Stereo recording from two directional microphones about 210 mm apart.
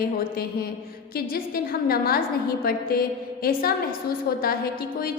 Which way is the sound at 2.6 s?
45° left (ahead or behind).